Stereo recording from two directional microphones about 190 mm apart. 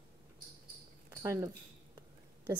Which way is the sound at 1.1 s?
15° right (ahead or behind).